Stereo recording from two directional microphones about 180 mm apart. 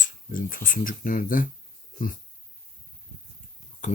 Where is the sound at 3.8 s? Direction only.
45° left (ahead or behind).